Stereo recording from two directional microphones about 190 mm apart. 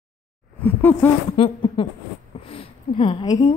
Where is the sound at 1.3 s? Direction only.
30° left (ahead or behind).